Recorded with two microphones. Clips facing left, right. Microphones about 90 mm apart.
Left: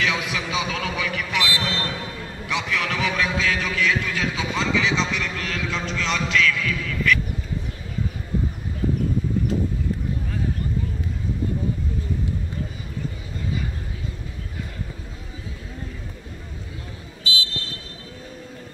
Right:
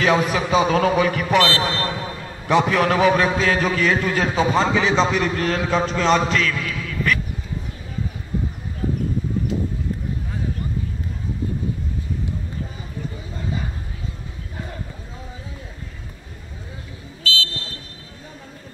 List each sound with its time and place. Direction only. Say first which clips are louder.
0.0 s a man's voice: right 7 dB; 40° right (ahead or behind)
17.2 s vehicle: right 4 dB; 15° left (ahead or behind)